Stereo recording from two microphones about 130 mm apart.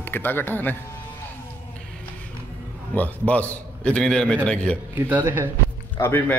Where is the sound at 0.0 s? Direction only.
15° left (ahead or behind).